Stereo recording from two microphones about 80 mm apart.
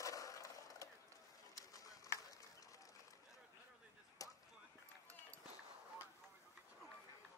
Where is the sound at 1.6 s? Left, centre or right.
Left.